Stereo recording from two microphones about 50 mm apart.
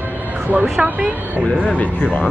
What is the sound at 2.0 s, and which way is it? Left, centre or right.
Speech, left.